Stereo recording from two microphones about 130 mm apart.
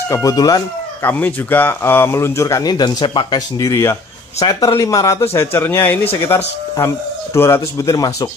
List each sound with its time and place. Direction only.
0.1 s speech: 30° left (ahead or behind)
1.0 s speech: 15° left (ahead or behind)